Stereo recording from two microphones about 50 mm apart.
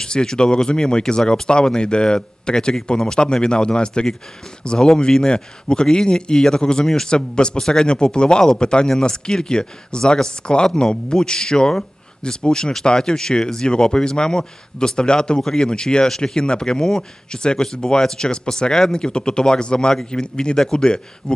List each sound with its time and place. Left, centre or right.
0.0 s speech: centre